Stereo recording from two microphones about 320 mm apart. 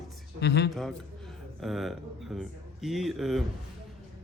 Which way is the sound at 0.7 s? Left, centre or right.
Centre.